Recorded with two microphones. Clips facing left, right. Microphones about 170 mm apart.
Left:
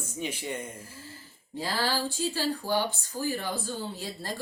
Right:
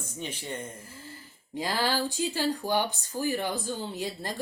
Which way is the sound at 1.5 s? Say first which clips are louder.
Right 1 dB; 15° right (ahead or behind).